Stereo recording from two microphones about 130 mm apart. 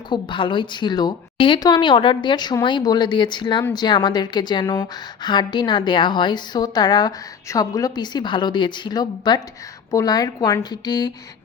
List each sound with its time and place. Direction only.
0.1 s a woman's voice: 40° left (ahead or behind)